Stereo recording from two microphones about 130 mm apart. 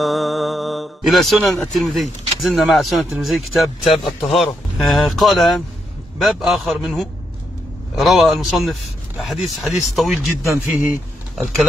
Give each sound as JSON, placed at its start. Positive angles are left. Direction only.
{"t": 0.0, "sound": "a man's voice", "side_deg": 0}
{"t": 10.5, "sound": "a man's voice", "side_deg": -20}